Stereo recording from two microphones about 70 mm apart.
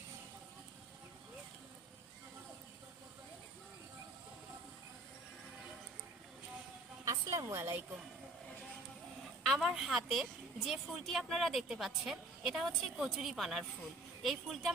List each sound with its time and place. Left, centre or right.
7.0 s a woman's voice: right
9.4 s a woman's voice: centre